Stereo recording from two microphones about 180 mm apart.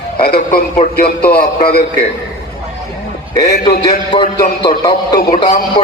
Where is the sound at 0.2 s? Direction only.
55° left (ahead or behind).